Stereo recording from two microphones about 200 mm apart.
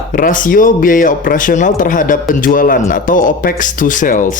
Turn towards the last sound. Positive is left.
turn(degrees=40)  # may be behind; listen again after turning